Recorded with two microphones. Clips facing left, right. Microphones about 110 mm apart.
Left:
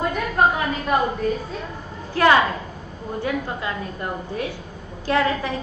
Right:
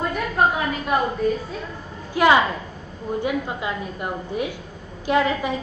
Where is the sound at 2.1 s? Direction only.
15° right (ahead or behind).